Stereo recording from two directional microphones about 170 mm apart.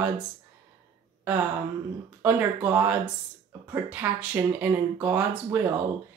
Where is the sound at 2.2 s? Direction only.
10° right (ahead or behind).